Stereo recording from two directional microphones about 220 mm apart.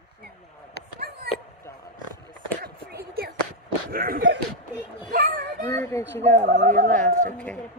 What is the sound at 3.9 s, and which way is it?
Speech, 45° right (ahead or behind).